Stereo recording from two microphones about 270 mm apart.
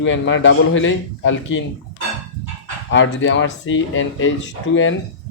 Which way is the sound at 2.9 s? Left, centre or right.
Left.